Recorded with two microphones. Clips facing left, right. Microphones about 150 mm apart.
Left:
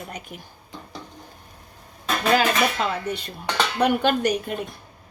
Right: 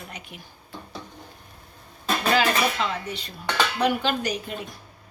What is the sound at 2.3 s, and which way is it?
Speech, 50° left (ahead or behind).